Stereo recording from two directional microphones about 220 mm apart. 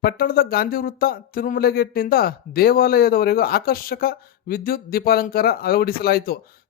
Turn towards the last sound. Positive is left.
turn(degrees=45)  # may be behind; listen again after turning